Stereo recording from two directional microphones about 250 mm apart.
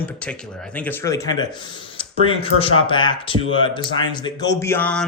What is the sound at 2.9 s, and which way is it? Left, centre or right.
Speech, centre.